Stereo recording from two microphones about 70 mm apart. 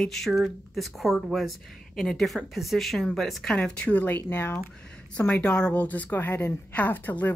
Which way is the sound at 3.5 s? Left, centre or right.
Centre.